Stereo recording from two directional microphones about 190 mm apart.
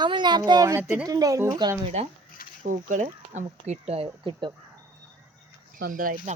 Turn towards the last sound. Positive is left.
turn(degrees=-45)  # may be behind; listen again after turning